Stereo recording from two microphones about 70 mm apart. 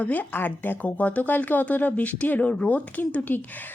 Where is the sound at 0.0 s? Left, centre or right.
Left.